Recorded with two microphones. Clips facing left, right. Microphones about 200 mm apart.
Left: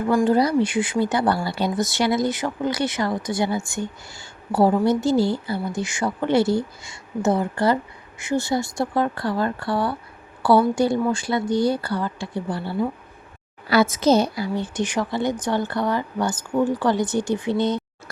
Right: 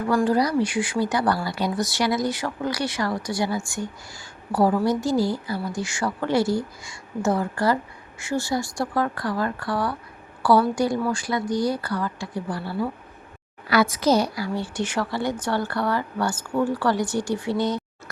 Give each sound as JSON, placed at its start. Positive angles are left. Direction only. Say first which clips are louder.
{"t": 0.1, "sound": "speech", "louder": "left 2 dB", "side_deg": 25}